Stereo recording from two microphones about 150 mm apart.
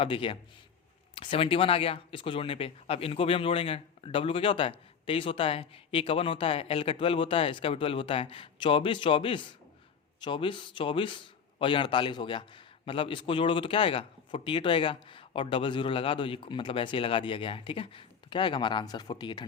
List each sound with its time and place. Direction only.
0.0 s a man's voice: 35° left (ahead or behind)